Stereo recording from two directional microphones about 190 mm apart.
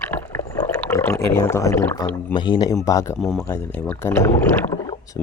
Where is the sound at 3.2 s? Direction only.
Centre (ahead or behind).